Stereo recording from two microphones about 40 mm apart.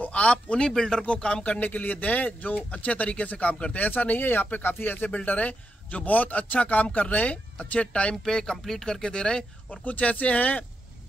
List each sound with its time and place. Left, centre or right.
0.0 s speech: left
0.7 s speech: centre
1.0 s speech: left
1.6 s a man's voice: left
5.1 s a man's voice: left
8.2 s speech: centre
9.8 s a man's voice: left